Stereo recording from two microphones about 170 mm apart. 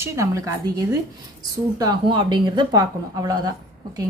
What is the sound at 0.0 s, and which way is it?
Speech, 15° right (ahead or behind).